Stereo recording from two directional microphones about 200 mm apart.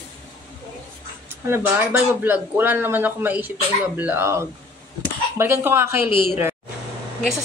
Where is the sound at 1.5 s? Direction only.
10° right (ahead or behind).